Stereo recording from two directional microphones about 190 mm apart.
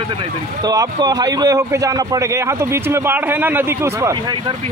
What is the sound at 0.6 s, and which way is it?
A man's voice, 20° right (ahead or behind).